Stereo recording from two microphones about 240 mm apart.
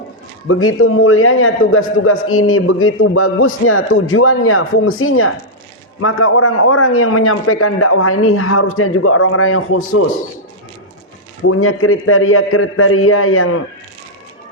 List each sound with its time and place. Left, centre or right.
0.4 s a man's voice: left
11.4 s a man's voice: left